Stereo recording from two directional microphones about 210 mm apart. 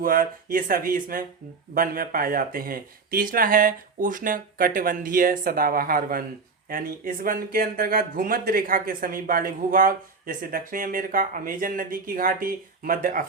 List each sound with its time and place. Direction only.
0.0 s speech: 40° right (ahead or behind)